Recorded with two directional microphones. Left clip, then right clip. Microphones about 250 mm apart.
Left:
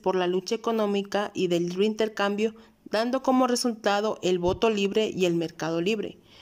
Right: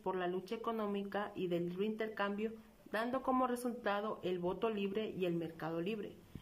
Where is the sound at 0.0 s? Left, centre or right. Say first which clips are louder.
Left 13 dB; left.